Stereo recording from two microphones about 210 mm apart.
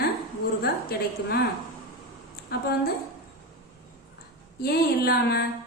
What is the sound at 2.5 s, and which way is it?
Speech, 50° left (ahead or behind).